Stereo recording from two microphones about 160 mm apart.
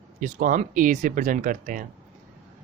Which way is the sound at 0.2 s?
55° right (ahead or behind).